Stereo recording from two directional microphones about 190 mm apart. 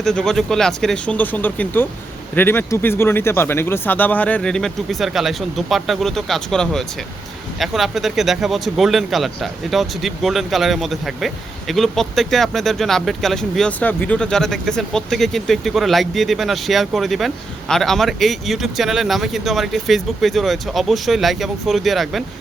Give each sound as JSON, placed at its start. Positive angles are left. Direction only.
{"t": 0.0, "sound": "speech", "side_deg": 5}